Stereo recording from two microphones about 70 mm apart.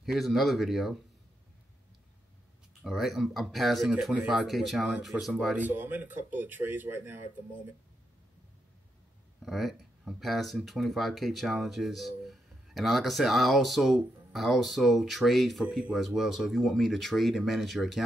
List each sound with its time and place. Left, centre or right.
0.0 s speech: centre
2.8 s speech: centre
4.1 s speech: centre
4.5 s speech: centre
5.6 s speech: right
9.4 s speech: centre